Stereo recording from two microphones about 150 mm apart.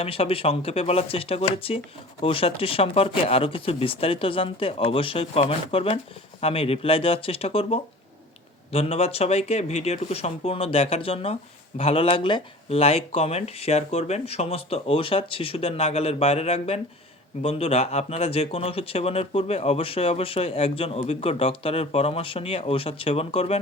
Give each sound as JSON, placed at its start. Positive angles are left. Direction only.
{"t": 0.0, "sound": "speech", "side_deg": 40}